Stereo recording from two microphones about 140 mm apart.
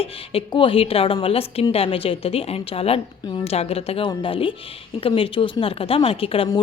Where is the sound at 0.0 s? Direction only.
40° left (ahead or behind).